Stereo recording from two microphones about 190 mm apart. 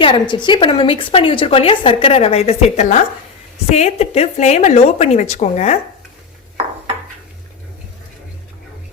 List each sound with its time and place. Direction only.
0.0 s a woman's voice: 25° left (ahead or behind)